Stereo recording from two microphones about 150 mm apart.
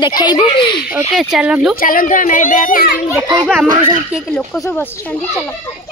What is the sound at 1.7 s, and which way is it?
A child's voice, 65° left (ahead or behind).